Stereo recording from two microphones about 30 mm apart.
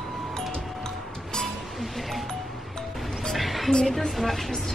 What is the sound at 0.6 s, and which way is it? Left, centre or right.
Music, centre.